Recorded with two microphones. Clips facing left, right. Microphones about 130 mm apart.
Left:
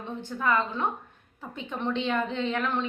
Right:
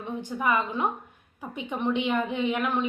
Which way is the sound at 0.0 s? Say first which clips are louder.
Right 2 dB; 15° right (ahead or behind).